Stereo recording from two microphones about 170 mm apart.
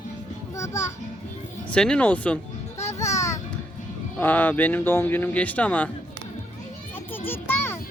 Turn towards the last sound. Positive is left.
turn(degrees=15)  # may be behind; listen again after turning